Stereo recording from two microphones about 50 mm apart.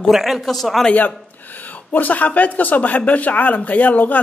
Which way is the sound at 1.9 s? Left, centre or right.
Left.